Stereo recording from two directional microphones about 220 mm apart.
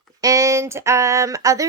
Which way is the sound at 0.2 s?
15° right (ahead or behind).